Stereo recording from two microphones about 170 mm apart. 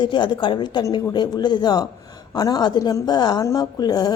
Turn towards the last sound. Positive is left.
turn(degrees=25)  # may be behind; listen again after turning